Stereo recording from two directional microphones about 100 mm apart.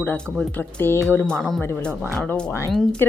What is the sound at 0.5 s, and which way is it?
Speech, 20° left (ahead or behind).